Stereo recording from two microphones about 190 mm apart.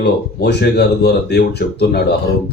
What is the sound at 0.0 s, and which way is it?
Speech, 60° left (ahead or behind).